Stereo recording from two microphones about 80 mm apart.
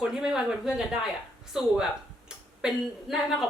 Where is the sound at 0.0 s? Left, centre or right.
Centre.